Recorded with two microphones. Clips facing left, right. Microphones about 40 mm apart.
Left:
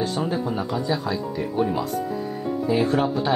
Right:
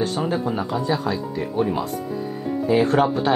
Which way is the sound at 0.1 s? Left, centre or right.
Centre.